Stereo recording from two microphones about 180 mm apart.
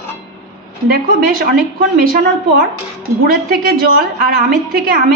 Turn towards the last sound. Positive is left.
turn(degrees=-55)  # may be behind; listen again after turning